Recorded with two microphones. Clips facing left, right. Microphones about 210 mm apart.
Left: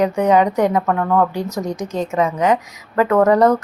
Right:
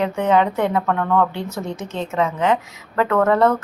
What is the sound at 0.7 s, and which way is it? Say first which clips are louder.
Speech: left 2 dB; 10° left (ahead or behind).